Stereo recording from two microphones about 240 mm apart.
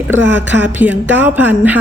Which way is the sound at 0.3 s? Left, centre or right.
Centre.